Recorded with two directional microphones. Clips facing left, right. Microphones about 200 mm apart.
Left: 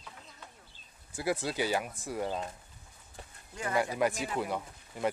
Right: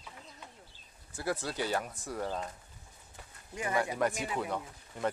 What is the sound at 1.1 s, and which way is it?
Speech, 10° left (ahead or behind).